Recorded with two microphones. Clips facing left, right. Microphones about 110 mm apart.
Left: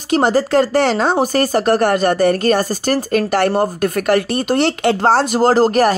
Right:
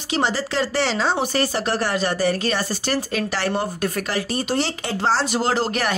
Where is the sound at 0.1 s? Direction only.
50° left (ahead or behind).